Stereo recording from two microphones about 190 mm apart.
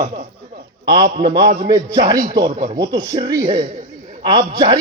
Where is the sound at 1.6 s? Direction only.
20° right (ahead or behind).